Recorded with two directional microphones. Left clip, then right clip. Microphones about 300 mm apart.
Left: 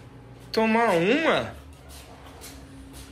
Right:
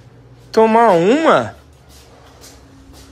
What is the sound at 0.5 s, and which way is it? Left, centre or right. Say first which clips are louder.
Speech: right 11 dB; right.